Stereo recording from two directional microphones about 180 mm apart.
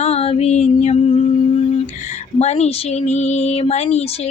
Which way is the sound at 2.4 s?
40° left (ahead or behind).